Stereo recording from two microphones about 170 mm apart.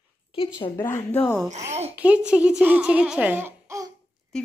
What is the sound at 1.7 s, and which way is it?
Speech, 40° right (ahead or behind).